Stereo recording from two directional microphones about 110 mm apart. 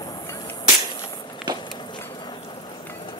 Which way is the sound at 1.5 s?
40° left (ahead or behind).